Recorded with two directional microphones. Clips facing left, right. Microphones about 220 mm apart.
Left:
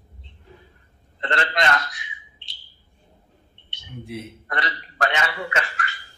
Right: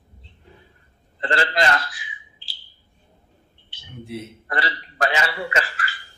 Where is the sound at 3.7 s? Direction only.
Centre (ahead or behind).